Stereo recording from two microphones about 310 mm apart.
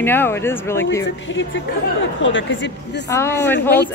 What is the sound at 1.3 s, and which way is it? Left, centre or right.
Speech, left.